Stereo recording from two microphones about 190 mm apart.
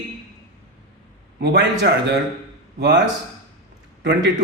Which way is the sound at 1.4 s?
60° right (ahead or behind).